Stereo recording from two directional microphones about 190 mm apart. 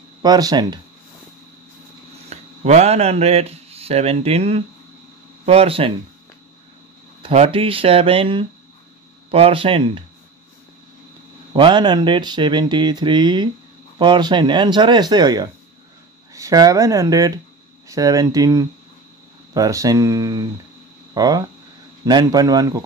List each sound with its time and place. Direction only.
0.2 s speech: 20° right (ahead or behind)
2.2 s speech: 35° right (ahead or behind)
7.2 s speech: 30° right (ahead or behind)
11.5 s speech: 25° right (ahead or behind)